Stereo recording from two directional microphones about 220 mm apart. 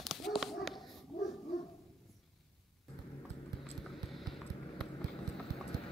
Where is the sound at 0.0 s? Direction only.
Centre (ahead or behind).